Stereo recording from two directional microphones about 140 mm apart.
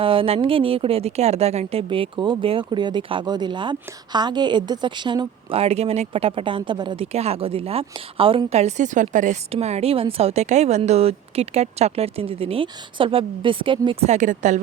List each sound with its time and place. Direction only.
0.0 s a woman's voice: 40° right (ahead or behind); by 9.4 s 65° right (ahead or behind)
9.5 s speech: 50° right (ahead or behind)